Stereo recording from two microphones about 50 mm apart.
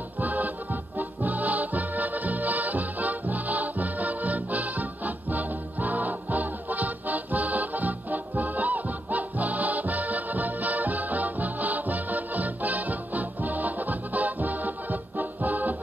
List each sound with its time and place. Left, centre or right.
0.2 s music: right